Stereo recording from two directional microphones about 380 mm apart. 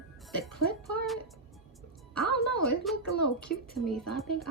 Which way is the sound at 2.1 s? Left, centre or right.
Left.